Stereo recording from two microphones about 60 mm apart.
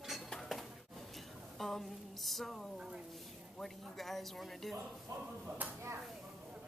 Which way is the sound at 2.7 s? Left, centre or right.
Centre.